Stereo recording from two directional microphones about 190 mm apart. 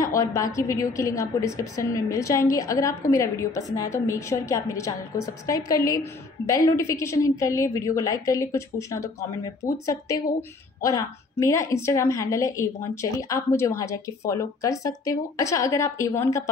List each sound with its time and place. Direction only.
0.0 s a woman's voice: 15° left (ahead or behind)
10.8 s a woman's voice: 20° left (ahead or behind)